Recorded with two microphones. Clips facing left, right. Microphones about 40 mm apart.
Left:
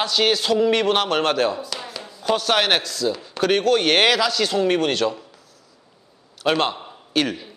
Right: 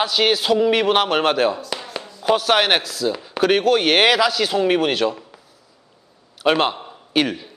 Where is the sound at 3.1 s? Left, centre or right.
Centre.